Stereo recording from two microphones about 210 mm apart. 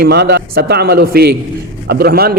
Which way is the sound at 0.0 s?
50° right (ahead or behind).